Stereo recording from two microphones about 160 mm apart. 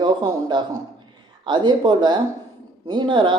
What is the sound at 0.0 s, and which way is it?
Speech, 30° right (ahead or behind).